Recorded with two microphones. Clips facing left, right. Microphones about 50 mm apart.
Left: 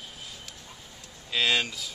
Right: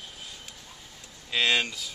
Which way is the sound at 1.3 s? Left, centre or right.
Centre.